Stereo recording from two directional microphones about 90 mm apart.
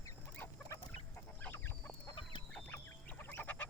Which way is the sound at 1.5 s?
25° left (ahead or behind).